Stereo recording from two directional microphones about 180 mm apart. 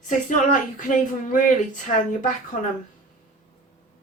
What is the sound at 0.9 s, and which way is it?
Speech, 45° left (ahead or behind).